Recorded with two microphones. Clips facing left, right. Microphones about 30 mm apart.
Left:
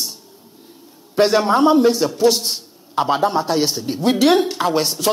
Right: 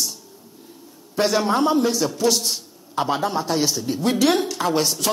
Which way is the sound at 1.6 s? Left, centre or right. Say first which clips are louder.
Left 6 dB; left.